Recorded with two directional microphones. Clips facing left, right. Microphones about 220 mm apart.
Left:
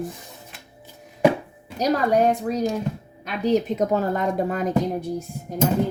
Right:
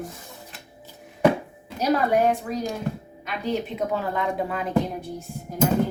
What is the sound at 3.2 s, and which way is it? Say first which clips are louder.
A woman's voice: left 6 dB; 40° left (ahead or behind).